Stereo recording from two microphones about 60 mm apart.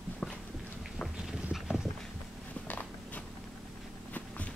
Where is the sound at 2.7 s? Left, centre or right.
Left.